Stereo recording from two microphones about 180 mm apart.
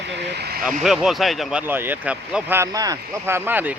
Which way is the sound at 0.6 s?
5° right (ahead or behind).